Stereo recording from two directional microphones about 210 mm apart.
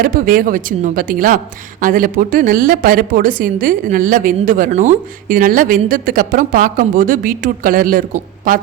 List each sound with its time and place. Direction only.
0.0 s a woman's voice: 40° right (ahead or behind)